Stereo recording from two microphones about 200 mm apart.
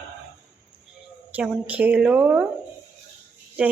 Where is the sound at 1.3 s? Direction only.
5° right (ahead or behind).